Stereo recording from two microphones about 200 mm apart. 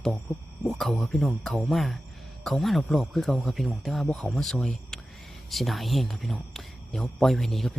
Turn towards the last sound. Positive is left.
turn(degrees=0)  # may be behind; listen again after turning